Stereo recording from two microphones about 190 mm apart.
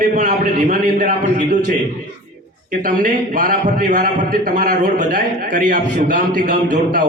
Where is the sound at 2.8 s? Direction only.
45° right (ahead or behind).